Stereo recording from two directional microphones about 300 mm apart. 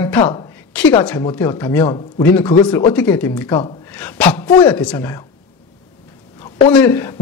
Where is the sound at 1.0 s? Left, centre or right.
Centre.